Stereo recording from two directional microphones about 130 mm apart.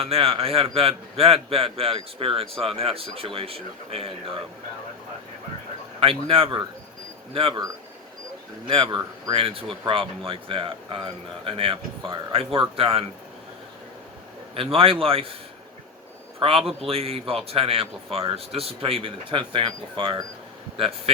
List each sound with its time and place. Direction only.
0.0 s a man's voice: 50° right (ahead or behind)
6.0 s a man's voice: 45° right (ahead or behind)
8.6 s a man's voice: 40° right (ahead or behind)
14.5 s a man's voice: 45° right (ahead or behind)
16.4 s a man's voice: 45° right (ahead or behind)